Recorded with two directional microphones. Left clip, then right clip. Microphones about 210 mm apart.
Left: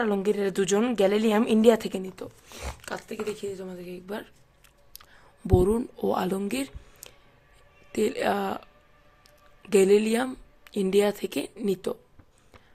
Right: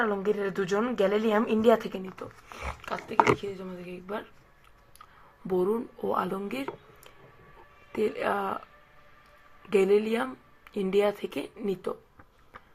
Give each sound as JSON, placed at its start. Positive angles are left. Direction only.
{"t": 0.0, "sound": "speech", "side_deg": 50}
{"t": 5.5, "sound": "speech", "side_deg": 45}